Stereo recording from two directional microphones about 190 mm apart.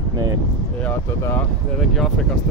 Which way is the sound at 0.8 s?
10° left (ahead or behind).